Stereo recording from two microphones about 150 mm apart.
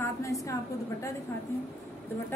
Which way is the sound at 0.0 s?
20° left (ahead or behind).